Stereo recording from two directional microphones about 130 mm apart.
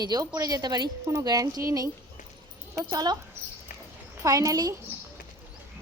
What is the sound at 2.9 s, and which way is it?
Speech, 35° right (ahead or behind).